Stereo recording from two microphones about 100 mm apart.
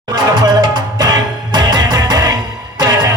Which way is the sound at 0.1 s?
40° right (ahead or behind).